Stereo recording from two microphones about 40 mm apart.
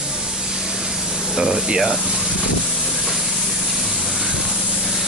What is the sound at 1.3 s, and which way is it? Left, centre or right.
Speech, right.